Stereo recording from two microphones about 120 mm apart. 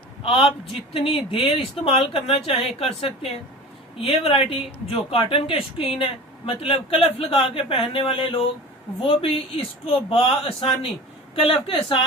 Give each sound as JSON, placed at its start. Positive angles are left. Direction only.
{"t": 0.2, "sound": "speech", "side_deg": 50}